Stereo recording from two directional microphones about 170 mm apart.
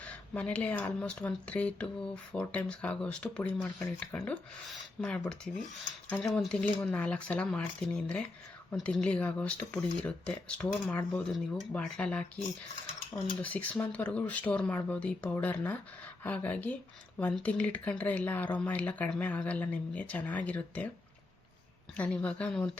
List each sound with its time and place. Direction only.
0.0 s speech: 5° left (ahead or behind)
13.4 s speech: 10° left (ahead or behind)
21.9 s speech: 10° left (ahead or behind)